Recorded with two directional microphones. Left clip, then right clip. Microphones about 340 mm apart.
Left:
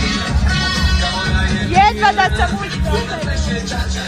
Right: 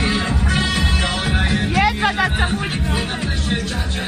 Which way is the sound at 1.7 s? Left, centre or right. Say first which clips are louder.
Left 7 dB; left.